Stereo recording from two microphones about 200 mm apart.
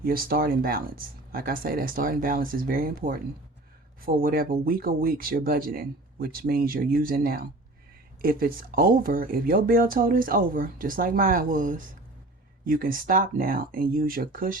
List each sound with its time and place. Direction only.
0.0 s speech: 50° right (ahead or behind)